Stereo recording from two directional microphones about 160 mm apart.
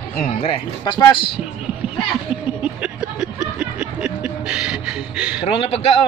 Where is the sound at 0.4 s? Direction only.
30° left (ahead or behind).